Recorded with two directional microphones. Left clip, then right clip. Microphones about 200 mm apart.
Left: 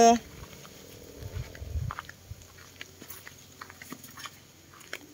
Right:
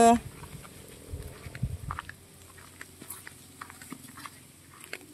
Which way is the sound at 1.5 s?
20° right (ahead or behind).